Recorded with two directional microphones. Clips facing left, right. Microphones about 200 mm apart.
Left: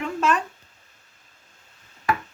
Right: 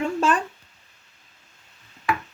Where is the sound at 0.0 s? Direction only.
30° right (ahead or behind).